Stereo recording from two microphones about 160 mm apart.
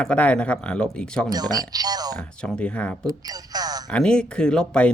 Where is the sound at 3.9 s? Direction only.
5° left (ahead or behind).